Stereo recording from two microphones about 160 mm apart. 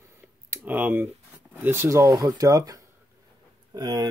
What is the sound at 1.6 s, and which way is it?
Speech, 15° right (ahead or behind).